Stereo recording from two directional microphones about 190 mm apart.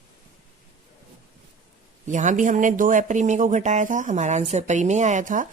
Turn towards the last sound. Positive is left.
turn(degrees=-40)  # may be behind; listen again after turning